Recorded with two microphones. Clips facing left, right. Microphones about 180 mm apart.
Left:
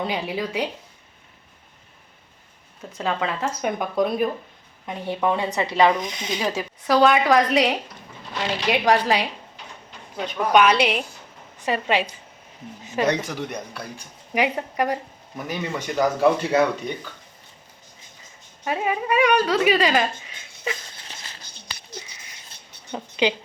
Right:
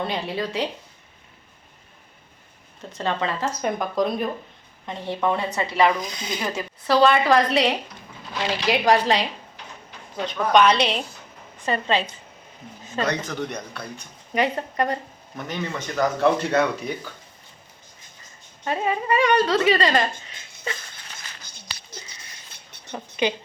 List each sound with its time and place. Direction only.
0.0 s speech: 10° left (ahead or behind)
2.9 s speech: 5° left (ahead or behind)
6.8 s speech: 5° left (ahead or behind)
13.3 s speech: 5° left (ahead or behind)
18.6 s speech: 10° left (ahead or behind)
22.9 s speech: 15° left (ahead or behind)